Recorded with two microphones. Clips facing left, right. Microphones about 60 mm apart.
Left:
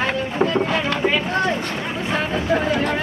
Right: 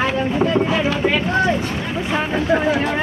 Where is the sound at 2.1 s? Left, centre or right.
Centre.